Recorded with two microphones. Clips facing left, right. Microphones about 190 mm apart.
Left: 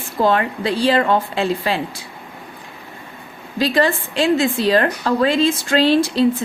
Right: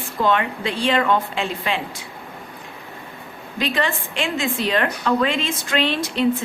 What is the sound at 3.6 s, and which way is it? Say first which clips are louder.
A woman's voice: left 6 dB; 35° left (ahead or behind).